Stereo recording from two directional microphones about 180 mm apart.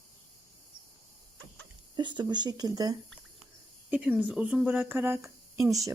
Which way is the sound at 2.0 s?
25° right (ahead or behind).